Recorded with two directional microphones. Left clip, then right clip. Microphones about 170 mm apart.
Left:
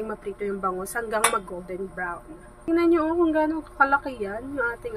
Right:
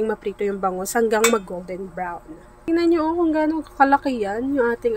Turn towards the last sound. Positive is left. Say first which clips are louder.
# right 8 dB
turn(degrees=-50)  # may be behind; listen again after turning